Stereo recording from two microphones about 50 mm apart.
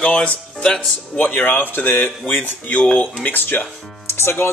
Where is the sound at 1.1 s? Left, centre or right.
Left.